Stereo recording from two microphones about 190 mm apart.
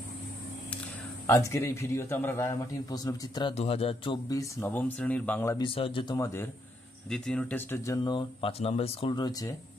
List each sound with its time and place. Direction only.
1.2 s a man's voice: 15° left (ahead or behind)
5.6 s speech: 30° left (ahead or behind)